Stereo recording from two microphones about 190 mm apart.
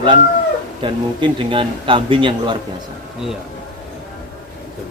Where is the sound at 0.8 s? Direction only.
25° right (ahead or behind).